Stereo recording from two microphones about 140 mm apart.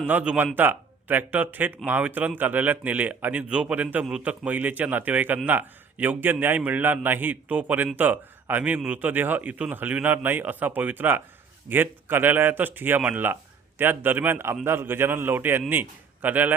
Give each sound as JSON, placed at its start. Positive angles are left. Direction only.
{"t": 0.1, "sound": "a man's voice", "side_deg": -10}